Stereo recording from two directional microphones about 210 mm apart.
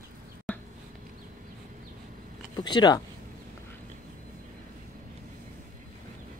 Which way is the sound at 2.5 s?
20° left (ahead or behind).